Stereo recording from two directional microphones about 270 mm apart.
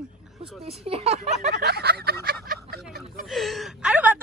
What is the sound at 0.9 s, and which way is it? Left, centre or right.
Speech, right.